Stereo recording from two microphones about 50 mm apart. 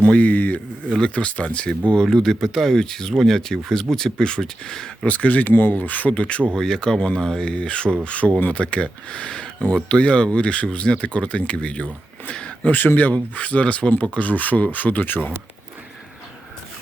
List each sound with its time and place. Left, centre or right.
0.0 s speech: left
0.9 s speech: left
1.9 s speech: centre
5.0 s speech: left
5.5 s speech: left
12.7 s speech: left